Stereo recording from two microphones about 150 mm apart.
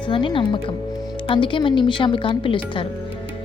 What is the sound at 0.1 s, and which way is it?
A woman's voice, 35° left (ahead or behind).